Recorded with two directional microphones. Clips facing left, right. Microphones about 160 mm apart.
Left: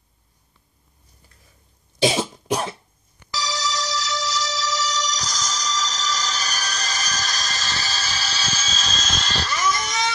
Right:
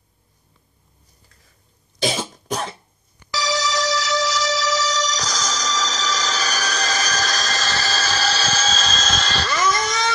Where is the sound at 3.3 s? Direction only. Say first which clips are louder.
Right 4 dB; 85° right.